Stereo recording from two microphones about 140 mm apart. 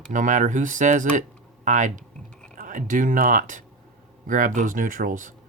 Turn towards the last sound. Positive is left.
turn(degrees=-65)  # may be behind; listen again after turning